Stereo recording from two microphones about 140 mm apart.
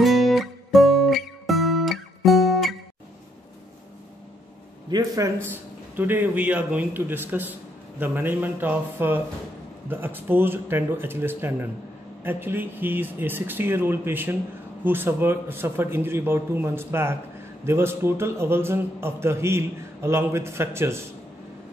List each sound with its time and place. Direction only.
0.0 s guitar: centre (ahead or behind)
4.8 s a man's voice: 25° right (ahead or behind)